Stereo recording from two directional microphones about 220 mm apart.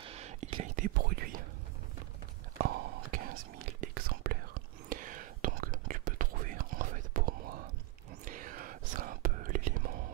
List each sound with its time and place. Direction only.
0.0 s whispering: 30° right (ahead or behind)
2.6 s whispering: 45° right (ahead or behind)